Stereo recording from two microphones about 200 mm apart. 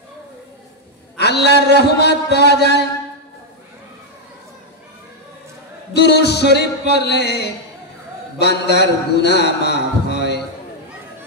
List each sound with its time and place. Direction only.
1.1 s a sound: 55° left (ahead or behind)
1.8 s a man's voice: 55° left (ahead or behind)
5.9 s a man's voice: 55° left (ahead or behind)